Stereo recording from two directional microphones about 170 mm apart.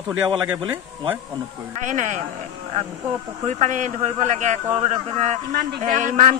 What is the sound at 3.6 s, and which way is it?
A man's voice, 45° right (ahead or behind).